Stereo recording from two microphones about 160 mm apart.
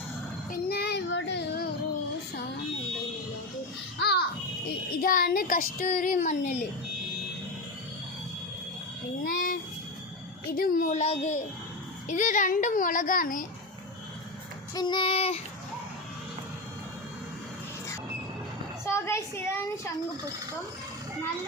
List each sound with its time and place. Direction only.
0.5 s child singing: 75° left (ahead or behind)
3.9 s babbling: 90° left
4.9 s a child's voice: 65° left (ahead or behind)
9.2 s a child's voice: 60° left (ahead or behind)
11.0 s a child's voice: 40° left (ahead or behind); by 13.4 s 60° left (ahead or behind)
14.8 s child singing: 30° left (ahead or behind)
18.9 s speech: 15° left (ahead or behind)